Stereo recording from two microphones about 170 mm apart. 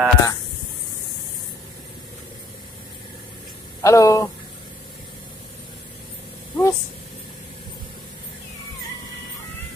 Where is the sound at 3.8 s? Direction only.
15° left (ahead or behind).